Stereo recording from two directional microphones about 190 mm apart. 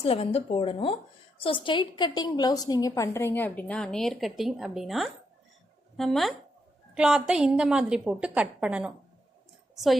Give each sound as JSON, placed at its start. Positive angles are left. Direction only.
{"t": 0.0, "sound": "a woman's voice", "side_deg": 30}